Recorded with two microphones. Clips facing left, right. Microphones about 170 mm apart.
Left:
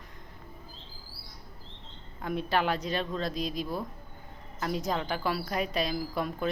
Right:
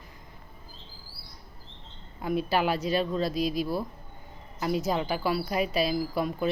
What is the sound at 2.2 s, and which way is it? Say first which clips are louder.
A woman's voice: right 2 dB; 10° right (ahead or behind).